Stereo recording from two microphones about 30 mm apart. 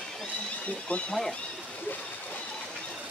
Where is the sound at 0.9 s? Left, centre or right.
Left.